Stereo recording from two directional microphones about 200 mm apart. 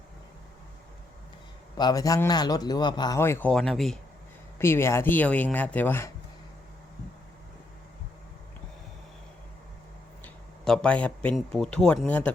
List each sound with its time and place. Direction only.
1.8 s speech: 20° left (ahead or behind); by 3.9 s centre (ahead or behind)
4.5 s speech: 10° left (ahead or behind)
10.2 s speech: 5° left (ahead or behind)